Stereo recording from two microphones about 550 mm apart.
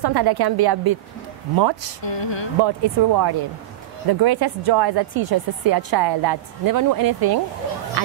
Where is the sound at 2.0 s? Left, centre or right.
Left.